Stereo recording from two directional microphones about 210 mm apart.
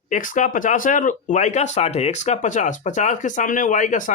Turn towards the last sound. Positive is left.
turn(degrees=35)  # may be behind; listen again after turning